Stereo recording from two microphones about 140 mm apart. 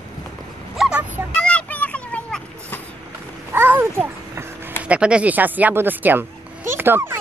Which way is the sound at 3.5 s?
15° right (ahead or behind).